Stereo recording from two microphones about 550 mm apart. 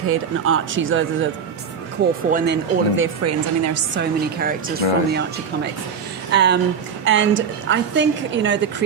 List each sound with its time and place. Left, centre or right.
0.1 s a woman's voice: right
6.3 s a woman's voice: centre